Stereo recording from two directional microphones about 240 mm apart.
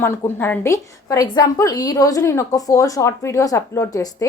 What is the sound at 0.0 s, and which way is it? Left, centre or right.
A woman's voice, centre.